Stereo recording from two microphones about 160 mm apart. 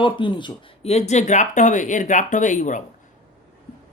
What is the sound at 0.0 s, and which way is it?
Speech, 30° left (ahead or behind).